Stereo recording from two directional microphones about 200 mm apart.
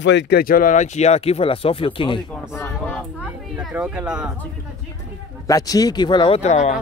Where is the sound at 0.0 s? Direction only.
60° left (ahead or behind); by 2.2 s 25° left (ahead or behind).